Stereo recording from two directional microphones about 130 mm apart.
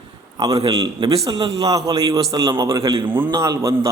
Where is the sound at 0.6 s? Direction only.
40° right (ahead or behind); by 3.8 s 25° right (ahead or behind).